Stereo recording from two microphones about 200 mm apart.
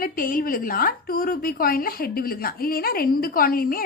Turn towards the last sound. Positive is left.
turn(degrees=45)  # may be behind; listen again after turning